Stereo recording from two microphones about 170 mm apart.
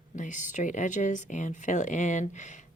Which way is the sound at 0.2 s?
45° left (ahead or behind).